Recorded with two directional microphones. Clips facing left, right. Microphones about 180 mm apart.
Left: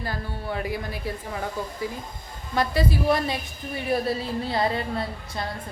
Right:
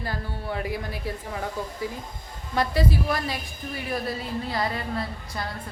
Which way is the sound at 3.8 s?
30° left (ahead or behind).